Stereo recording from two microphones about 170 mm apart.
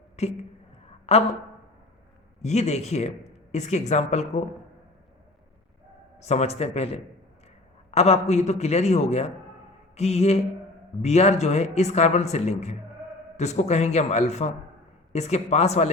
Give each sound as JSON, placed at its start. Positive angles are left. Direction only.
{"t": 0.2, "sound": "speech", "side_deg": 40}
{"t": 2.4, "sound": "speech", "side_deg": 40}
{"t": 6.2, "sound": "speech", "side_deg": 40}